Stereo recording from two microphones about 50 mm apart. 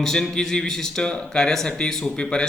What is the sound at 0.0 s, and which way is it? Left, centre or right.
A man's voice, centre.